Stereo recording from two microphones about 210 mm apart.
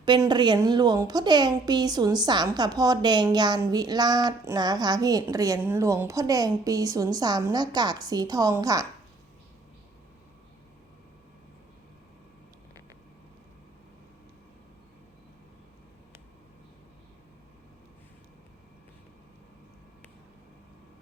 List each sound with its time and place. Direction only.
0.0 s speech: 20° right (ahead or behind)